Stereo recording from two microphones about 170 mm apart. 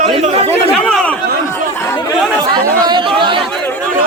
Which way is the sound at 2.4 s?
25° right (ahead or behind).